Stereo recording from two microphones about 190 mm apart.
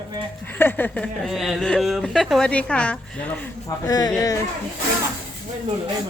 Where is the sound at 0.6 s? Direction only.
10° left (ahead or behind).